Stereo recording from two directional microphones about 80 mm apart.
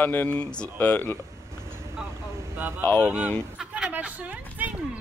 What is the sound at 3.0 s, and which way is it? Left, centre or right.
Chant, centre.